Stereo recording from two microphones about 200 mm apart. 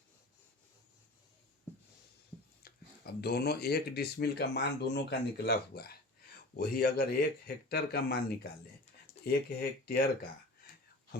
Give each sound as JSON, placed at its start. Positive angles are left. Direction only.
{"t": 2.6, "sound": "speech", "side_deg": 50}
{"t": 9.2, "sound": "speech", "side_deg": 50}